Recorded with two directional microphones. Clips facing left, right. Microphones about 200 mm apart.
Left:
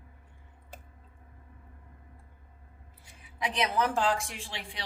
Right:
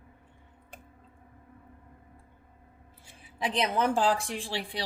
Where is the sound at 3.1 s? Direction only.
30° right (ahead or behind).